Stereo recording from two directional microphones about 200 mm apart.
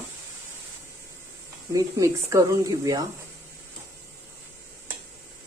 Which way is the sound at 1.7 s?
15° right (ahead or behind).